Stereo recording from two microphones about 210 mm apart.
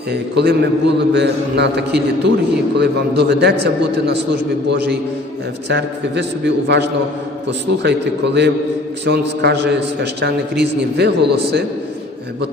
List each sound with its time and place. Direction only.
0.1 s a man's voice: 55° right (ahead or behind)
5.6 s a man's voice: 55° right (ahead or behind)